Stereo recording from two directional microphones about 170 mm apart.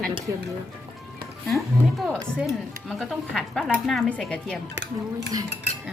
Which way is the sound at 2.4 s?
Centre (ahead or behind).